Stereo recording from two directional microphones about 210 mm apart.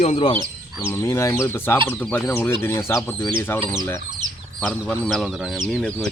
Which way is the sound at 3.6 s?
20° right (ahead or behind).